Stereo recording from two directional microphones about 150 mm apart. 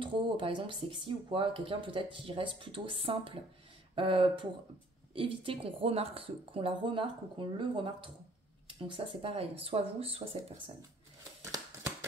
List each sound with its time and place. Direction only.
0.0 s speech: 35° right (ahead or behind)